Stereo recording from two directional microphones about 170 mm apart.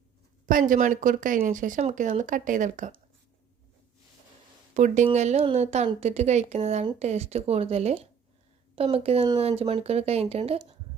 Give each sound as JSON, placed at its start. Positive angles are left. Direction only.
{"t": 0.4, "sound": "speech", "side_deg": -50}
{"t": 4.7, "sound": "a woman's voice", "side_deg": -45}